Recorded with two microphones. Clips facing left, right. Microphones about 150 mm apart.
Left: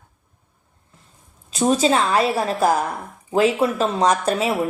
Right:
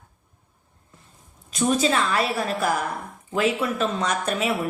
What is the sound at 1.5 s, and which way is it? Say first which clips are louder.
A woman's voice: left 4 dB; 35° left (ahead or behind).